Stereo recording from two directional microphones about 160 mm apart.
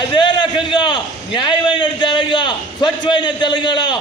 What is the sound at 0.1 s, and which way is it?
A man's voice, 30° left (ahead or behind).